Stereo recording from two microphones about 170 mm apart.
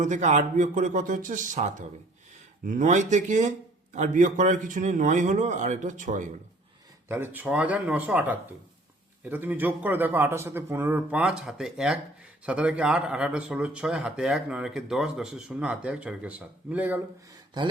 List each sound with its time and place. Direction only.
0.0 s a man's voice: 45° right (ahead or behind)
7.1 s a man's voice: 10° right (ahead or behind)